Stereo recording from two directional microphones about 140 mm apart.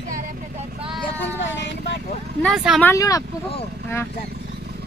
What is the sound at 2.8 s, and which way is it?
Speech, 25° left (ahead or behind).